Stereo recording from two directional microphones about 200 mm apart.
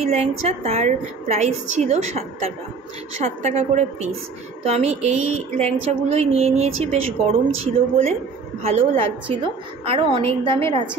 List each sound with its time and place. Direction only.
0.0 s a woman's voice: 30° right (ahead or behind)